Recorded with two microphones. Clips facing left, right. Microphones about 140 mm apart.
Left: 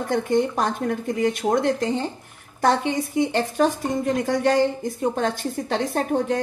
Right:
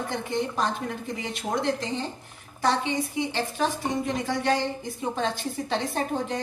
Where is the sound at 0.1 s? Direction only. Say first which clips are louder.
Left 11 dB; 50° left (ahead or behind).